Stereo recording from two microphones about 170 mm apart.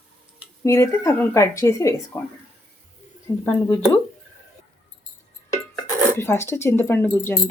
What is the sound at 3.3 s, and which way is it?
Speech, 25° left (ahead or behind).